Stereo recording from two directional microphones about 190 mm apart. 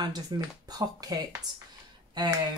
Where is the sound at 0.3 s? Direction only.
20° right (ahead or behind).